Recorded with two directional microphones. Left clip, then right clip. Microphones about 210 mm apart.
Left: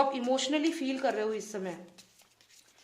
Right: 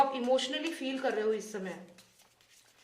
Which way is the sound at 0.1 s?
40° left (ahead or behind).